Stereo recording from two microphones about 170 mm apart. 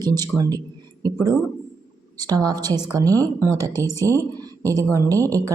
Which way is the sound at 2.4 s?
25° right (ahead or behind).